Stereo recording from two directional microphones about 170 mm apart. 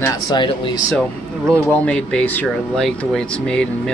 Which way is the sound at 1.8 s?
5° left (ahead or behind).